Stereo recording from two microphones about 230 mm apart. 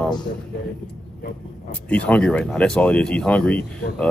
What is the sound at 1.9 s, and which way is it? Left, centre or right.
Speech, centre.